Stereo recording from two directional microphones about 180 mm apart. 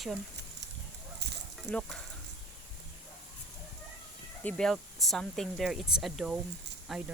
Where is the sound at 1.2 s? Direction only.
65° right (ahead or behind).